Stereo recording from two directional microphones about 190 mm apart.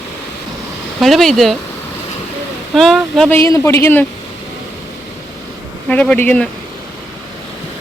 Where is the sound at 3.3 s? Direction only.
15° left (ahead or behind).